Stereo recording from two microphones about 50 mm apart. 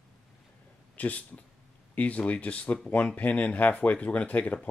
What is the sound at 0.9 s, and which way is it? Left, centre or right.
Speech, left.